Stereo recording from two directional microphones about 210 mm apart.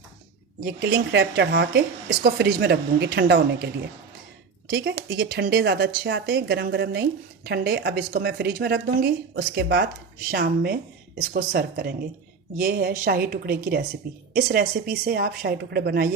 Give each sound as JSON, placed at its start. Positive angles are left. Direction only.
{"t": 0.8, "sound": "speech", "side_deg": -55}
{"t": 4.7, "sound": "speech", "side_deg": -50}